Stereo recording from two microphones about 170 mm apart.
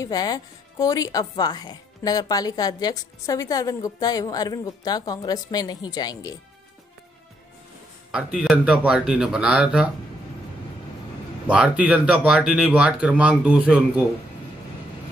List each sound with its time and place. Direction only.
0.0 s a woman's voice: 20° left (ahead or behind)
8.1 s speech: 5° right (ahead or behind)
11.4 s speech: 5° right (ahead or behind)